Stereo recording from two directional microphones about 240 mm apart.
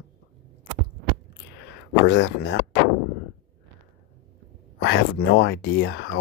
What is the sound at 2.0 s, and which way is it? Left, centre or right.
Speech, left.